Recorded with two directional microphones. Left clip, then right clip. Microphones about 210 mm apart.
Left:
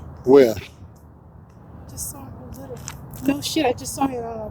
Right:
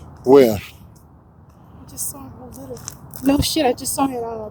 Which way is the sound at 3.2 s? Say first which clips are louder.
Right 4 dB; 55° right (ahead or behind).